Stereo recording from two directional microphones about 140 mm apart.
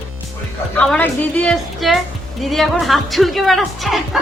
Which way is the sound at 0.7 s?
10° left (ahead or behind).